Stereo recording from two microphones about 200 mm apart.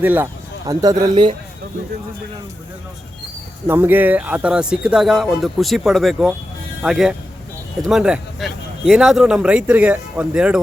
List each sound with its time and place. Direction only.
0.0 s speech: 10° right (ahead or behind); by 1.4 s 25° right (ahead or behind)
3.7 s speech: 10° right (ahead or behind)